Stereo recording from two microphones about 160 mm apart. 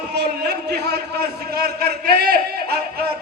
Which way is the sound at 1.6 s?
85° right.